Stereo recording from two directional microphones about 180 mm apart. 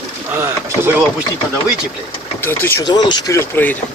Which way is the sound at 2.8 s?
25° left (ahead or behind).